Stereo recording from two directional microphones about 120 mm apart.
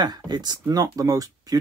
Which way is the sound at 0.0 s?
35° right (ahead or behind).